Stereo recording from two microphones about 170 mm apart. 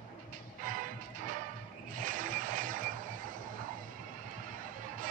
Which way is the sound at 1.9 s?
50° right (ahead or behind).